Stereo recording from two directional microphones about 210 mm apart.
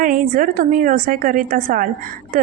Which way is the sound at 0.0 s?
40° right (ahead or behind).